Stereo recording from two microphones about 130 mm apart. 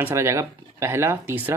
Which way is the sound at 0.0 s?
20° right (ahead or behind).